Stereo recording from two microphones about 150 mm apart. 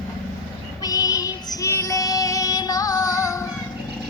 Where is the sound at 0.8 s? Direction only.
25° left (ahead or behind).